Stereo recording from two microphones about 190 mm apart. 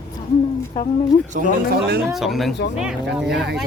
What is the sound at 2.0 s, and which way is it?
Speech, centre (ahead or behind).